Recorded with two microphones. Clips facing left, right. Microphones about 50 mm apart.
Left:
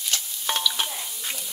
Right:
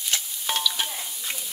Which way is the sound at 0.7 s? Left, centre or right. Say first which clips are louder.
Left 1 dB; centre.